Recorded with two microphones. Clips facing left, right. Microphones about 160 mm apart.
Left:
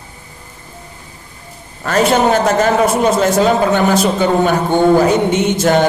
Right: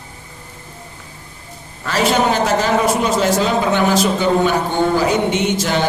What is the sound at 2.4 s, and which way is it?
A man's voice, 45° left (ahead or behind).